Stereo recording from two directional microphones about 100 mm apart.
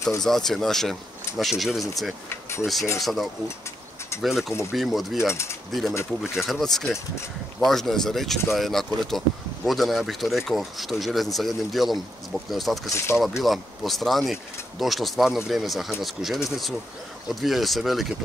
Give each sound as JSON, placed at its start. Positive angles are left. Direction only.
{"t": 0.2, "sound": "speech", "side_deg": 5}
{"t": 5.3, "sound": "speech", "side_deg": 25}
{"t": 5.7, "sound": "speech", "side_deg": 0}
{"t": 12.9, "sound": "speech", "side_deg": 25}
{"t": 13.4, "sound": "speech", "side_deg": 0}